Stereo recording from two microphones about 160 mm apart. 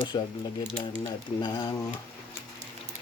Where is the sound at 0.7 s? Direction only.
40° left (ahead or behind).